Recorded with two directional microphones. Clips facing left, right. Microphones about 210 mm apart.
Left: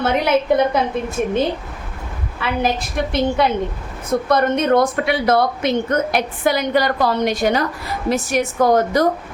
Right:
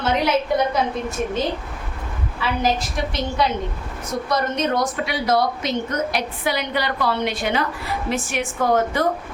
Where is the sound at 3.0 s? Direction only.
55° left (ahead or behind).